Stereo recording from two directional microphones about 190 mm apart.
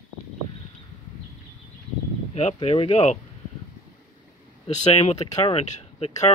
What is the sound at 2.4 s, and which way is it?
Speech, 35° left (ahead or behind).